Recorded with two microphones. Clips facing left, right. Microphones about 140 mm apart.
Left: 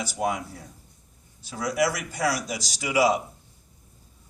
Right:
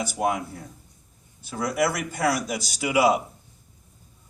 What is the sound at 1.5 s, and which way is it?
A man's voice, 55° right (ahead or behind).